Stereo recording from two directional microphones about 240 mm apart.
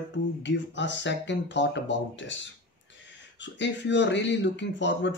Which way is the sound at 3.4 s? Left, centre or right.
Left.